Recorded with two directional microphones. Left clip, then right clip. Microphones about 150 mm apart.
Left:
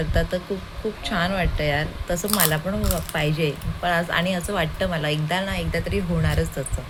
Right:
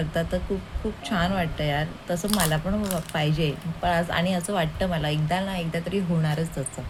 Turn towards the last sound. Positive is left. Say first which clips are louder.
# left 3 dB
turn(degrees=0)  # may be behind; listen again after turning